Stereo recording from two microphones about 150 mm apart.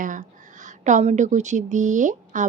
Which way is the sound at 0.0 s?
60° right (ahead or behind).